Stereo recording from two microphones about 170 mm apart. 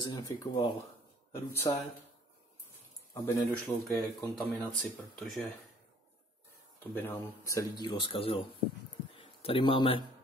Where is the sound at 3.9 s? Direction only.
5° left (ahead or behind).